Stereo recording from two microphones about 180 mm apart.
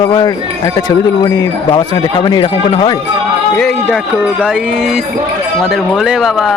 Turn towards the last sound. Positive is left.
turn(degrees=0)  # may be behind; listen again after turning